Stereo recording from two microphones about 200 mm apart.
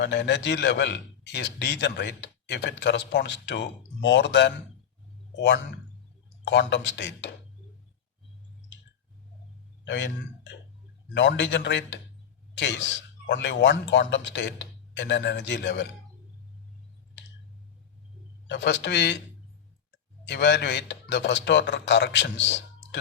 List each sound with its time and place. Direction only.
0.0 s a man's voice: 60° left (ahead or behind)
9.8 s a man's voice: 65° left (ahead or behind)
18.4 s a man's voice: 60° left (ahead or behind)
20.2 s a man's voice: 60° left (ahead or behind)